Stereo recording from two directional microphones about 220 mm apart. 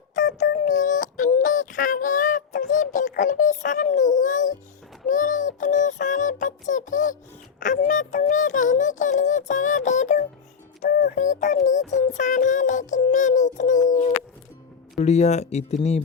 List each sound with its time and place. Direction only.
0.3 s child singing: 45° left (ahead or behind)
5.0 s synthetic singing: 35° left (ahead or behind)
7.6 s music: 35° left (ahead or behind)